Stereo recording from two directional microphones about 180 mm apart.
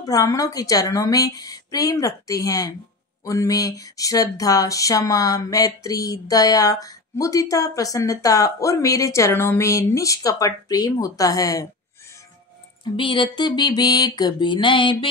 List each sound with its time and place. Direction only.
0.0 s speech: 20° left (ahead or behind)
12.9 s speech: 25° left (ahead or behind)